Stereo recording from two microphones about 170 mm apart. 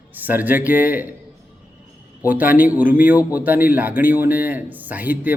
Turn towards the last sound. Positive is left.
turn(degrees=-10)  # may be behind; listen again after turning